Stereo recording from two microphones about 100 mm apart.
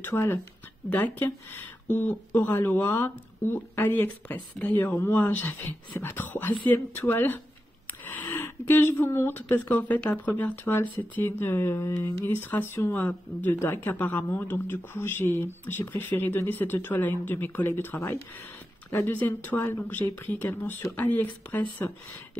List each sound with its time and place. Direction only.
0.0 s speech: 20° left (ahead or behind)